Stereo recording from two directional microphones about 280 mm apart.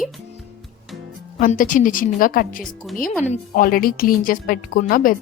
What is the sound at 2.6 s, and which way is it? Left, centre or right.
Speech, centre.